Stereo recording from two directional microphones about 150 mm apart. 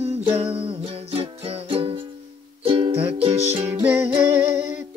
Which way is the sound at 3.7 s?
10° right (ahead or behind).